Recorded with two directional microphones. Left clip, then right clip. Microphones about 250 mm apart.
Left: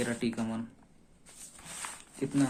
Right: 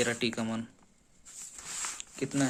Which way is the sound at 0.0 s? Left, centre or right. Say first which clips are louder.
Right 3 dB; right.